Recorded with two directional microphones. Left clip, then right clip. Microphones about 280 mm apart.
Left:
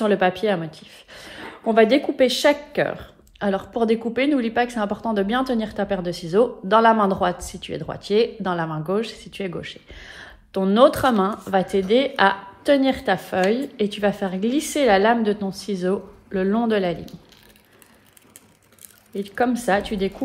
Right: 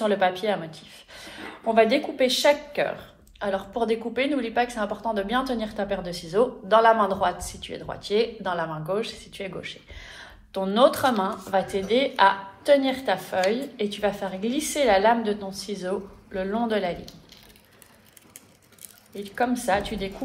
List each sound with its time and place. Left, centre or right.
0.0 s speech: left
19.1 s speech: left